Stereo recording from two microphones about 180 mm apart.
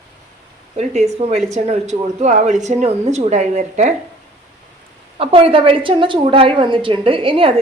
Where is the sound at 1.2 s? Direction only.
35° right (ahead or behind).